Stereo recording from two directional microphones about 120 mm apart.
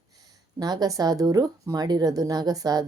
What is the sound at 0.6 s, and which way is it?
Speech, 35° right (ahead or behind).